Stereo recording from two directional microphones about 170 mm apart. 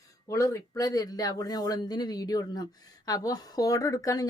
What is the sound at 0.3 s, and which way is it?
Speech, 20° left (ahead or behind).